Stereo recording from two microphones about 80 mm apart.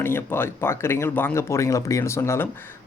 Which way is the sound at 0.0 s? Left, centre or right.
Left.